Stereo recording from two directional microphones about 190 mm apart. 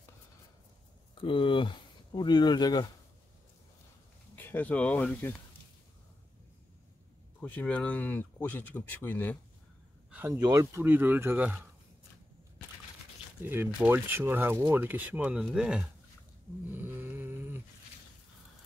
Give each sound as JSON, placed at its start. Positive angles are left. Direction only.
{"t": 1.1, "sound": "speech", "side_deg": 25}
{"t": 4.4, "sound": "speech", "side_deg": 10}
{"t": 7.4, "sound": "speech", "side_deg": 10}
{"t": 10.4, "sound": "speech", "side_deg": -15}
{"t": 13.4, "sound": "speech", "side_deg": -10}
{"t": 16.6, "sound": "a sound", "side_deg": -10}